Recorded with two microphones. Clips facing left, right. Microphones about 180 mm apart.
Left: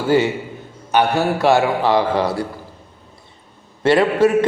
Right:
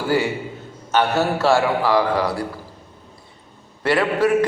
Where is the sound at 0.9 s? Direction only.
15° left (ahead or behind).